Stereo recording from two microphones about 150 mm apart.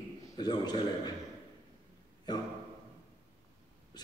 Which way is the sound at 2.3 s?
25° left (ahead or behind).